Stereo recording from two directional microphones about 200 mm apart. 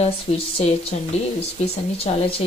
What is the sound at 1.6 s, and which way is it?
Speech, 30° left (ahead or behind).